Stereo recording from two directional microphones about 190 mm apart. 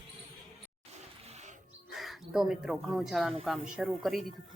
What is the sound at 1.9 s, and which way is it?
Speech, centre (ahead or behind).